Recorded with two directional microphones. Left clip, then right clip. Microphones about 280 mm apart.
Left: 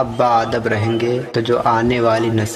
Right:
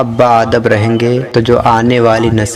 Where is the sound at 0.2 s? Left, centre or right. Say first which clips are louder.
Right 8 dB; right.